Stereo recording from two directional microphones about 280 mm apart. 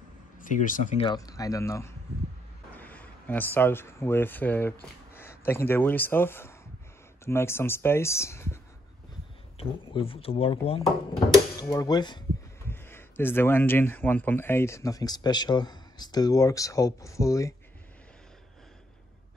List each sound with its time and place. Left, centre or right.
0.4 s speech: left; by 8.5 s centre
9.6 s speech: centre